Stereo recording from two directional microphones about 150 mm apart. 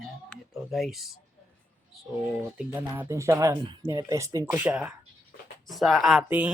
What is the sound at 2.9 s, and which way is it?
Speech, 15° right (ahead or behind).